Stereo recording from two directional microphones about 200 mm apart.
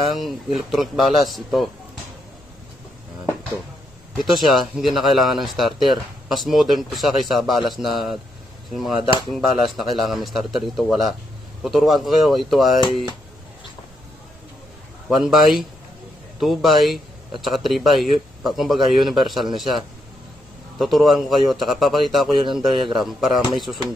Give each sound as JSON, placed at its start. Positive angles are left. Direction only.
{"t": 0.1, "sound": "speech", "side_deg": 0}
{"t": 4.2, "sound": "speech", "side_deg": 0}
{"t": 9.3, "sound": "speech", "side_deg": 0}
{"t": 15.0, "sound": "speech", "side_deg": 0}
{"t": 20.8, "sound": "speech", "side_deg": 0}